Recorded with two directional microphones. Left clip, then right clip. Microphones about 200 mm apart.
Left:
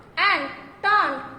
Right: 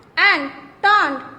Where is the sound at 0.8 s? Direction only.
55° right (ahead or behind).